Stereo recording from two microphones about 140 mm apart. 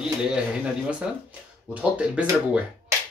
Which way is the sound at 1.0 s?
5° right (ahead or behind).